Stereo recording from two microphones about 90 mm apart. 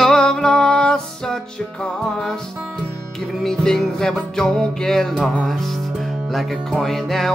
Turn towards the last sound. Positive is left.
turn(degrees=5)  # may be behind; listen again after turning